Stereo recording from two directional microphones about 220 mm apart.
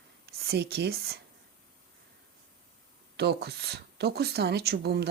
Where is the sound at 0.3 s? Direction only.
45° right (ahead or behind).